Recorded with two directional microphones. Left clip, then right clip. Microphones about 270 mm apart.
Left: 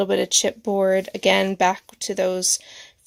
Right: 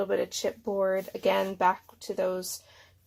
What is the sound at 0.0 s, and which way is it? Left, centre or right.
Speech, left.